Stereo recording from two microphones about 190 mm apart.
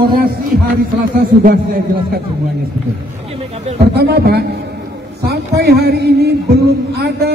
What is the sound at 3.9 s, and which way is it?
Speech, 55° right (ahead or behind).